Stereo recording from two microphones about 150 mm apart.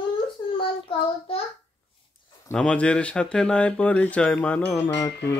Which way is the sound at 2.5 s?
5° left (ahead or behind).